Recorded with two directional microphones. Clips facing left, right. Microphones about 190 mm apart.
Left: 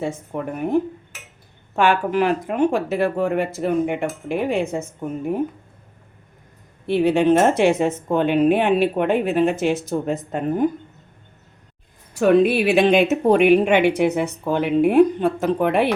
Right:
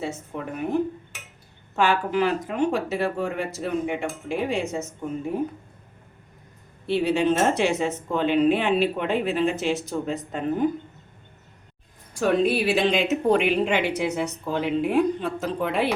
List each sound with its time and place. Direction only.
0.3 s speech: 50° left (ahead or behind)
1.7 s speech: 55° left (ahead or behind)
6.8 s speech: 55° left (ahead or behind)
12.4 s speech: 60° left (ahead or behind)